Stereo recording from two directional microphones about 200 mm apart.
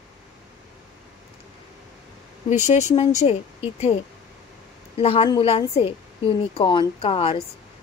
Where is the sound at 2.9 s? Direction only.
30° left (ahead or behind).